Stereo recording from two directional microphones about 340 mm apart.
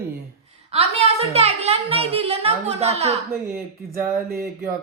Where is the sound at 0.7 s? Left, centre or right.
Centre.